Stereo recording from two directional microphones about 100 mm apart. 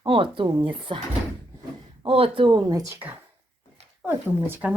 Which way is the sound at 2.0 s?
70° right (ahead or behind).